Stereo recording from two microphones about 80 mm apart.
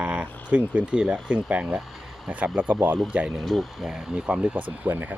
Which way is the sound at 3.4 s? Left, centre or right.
Centre.